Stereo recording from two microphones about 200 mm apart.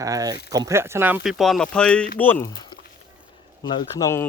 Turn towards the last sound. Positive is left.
turn(degrees=15)  # may be behind; listen again after turning